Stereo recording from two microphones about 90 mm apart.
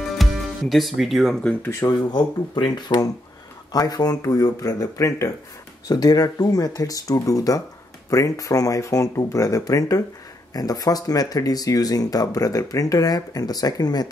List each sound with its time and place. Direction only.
0.2 s speech: centre (ahead or behind)
1.6 s speech: 30° left (ahead or behind)
2.0 s speech: 50° left (ahead or behind)
3.7 s speech: 45° left (ahead or behind)